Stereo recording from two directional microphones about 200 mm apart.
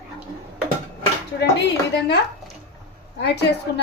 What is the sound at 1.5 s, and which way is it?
Speech, 60° left (ahead or behind).